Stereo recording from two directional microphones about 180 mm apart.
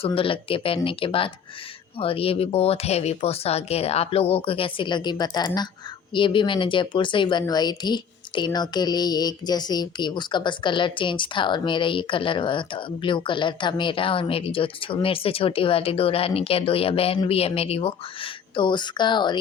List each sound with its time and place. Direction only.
0.0 s speech: 30° left (ahead or behind)